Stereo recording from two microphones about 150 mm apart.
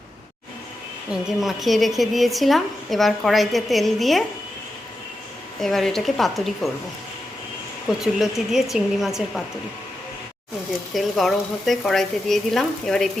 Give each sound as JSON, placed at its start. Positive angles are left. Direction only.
{"t": 1.4, "sound": "speech", "side_deg": 0}
{"t": 5.5, "sound": "speech", "side_deg": 0}
{"t": 8.0, "sound": "speech", "side_deg": 0}
{"t": 10.9, "sound": "speech", "side_deg": 0}